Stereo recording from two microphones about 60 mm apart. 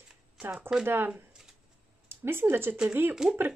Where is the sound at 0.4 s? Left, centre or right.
Right.